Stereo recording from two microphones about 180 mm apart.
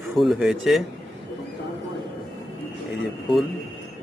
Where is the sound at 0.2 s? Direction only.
Centre (ahead or behind).